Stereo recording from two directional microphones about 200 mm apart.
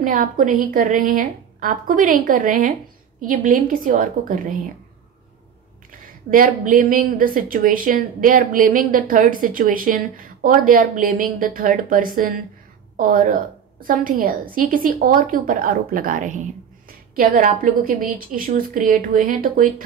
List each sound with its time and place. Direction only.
0.0 s a woman's voice: 40° right (ahead or behind)
6.3 s a woman's voice: 40° right (ahead or behind)